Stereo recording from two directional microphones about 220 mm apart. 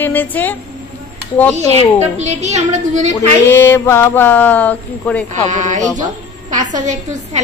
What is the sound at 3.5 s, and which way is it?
A woman's voice, 10° left (ahead or behind).